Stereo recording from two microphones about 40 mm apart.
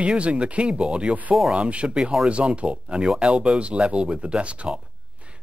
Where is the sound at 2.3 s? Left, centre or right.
Right.